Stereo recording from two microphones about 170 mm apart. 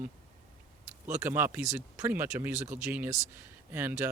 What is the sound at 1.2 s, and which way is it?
Speech, 15° right (ahead or behind).